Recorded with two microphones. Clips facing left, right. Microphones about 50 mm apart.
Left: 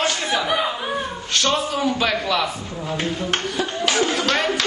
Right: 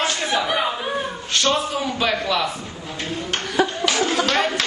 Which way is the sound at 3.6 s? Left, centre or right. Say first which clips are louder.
Right 10 dB; right.